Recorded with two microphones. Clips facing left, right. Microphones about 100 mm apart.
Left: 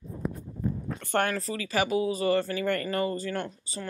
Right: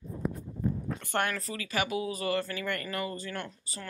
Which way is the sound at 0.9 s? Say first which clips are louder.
Left 4 dB; 35° left (ahead or behind).